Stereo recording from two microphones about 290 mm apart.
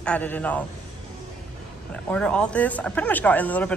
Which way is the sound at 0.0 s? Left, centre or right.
Centre.